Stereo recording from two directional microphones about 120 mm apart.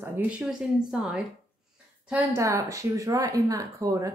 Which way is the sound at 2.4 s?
25° right (ahead or behind).